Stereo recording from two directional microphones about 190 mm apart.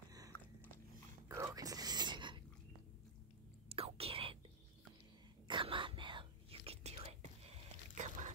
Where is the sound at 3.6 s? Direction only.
30° right (ahead or behind).